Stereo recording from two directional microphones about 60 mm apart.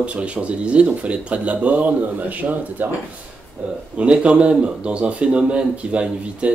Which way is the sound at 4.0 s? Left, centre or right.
Centre.